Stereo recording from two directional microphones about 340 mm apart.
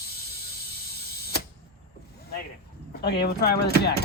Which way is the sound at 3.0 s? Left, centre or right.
Left.